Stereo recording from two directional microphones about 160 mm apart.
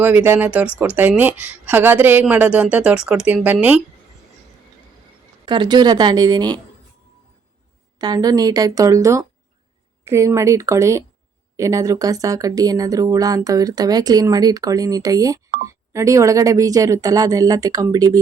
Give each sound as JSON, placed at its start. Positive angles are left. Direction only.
{"t": 0.0, "sound": "speech", "side_deg": -10}
{"t": 5.5, "sound": "speech", "side_deg": -30}
{"t": 7.9, "sound": "speech", "side_deg": -25}